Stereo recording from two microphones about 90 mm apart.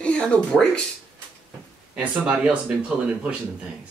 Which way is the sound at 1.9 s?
15° right (ahead or behind).